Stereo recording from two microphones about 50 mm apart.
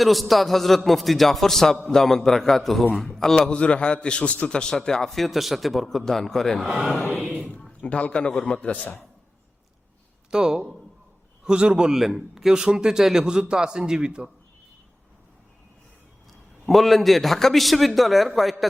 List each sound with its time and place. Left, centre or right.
0.0 s a man's voice: centre
3.5 s a man's voice: left; by 6.6 s centre
6.7 s a man's voice: centre
7.8 s a man's voice: left
10.3 s a man's voice: centre
11.9 s a man's voice: centre
16.6 s a man's voice: centre